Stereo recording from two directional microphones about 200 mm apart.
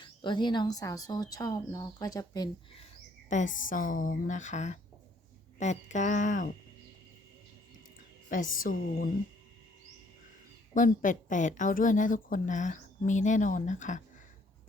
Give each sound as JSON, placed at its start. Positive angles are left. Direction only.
{"t": 0.0, "sound": "speech", "side_deg": 25}
{"t": 3.2, "sound": "a woman's voice", "side_deg": 40}
{"t": 8.3, "sound": "a woman's voice", "side_deg": 40}
{"t": 10.8, "sound": "a woman's voice", "side_deg": 40}